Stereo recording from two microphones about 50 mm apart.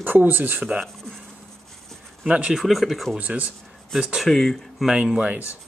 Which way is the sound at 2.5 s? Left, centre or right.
Centre.